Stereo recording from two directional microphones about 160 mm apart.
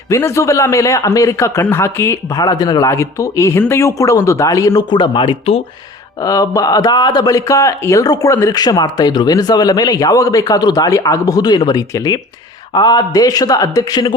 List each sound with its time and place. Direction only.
0.1 s speech: 15° left (ahead or behind); by 5.6 s 35° left (ahead or behind)
6.2 s speech: 20° left (ahead or behind)